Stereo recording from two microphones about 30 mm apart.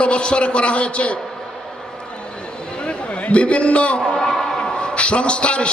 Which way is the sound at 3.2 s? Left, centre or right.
Left.